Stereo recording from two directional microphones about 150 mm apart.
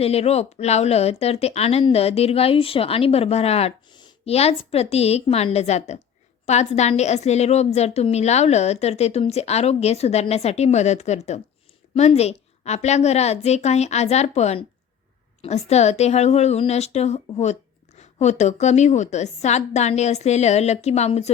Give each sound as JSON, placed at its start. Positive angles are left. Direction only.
{"t": 0.0, "sound": "a woman's voice", "side_deg": 45}